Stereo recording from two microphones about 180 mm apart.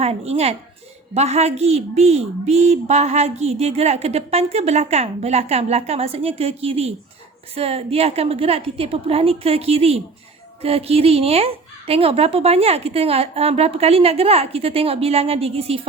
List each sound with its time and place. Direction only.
0.0 s a woman's voice: 35° right (ahead or behind)